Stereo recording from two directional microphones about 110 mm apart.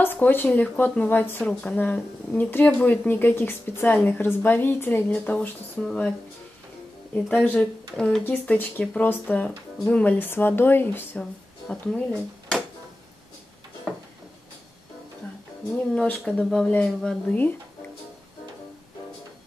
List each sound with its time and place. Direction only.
0.0 s a woman's voice: 20° left (ahead or behind)
7.2 s a woman's voice: 10° left (ahead or behind)
11.7 s speech: 10° left (ahead or behind)
13.9 s a sound: centre (ahead or behind)
15.9 s a woman's voice: 10° left (ahead or behind)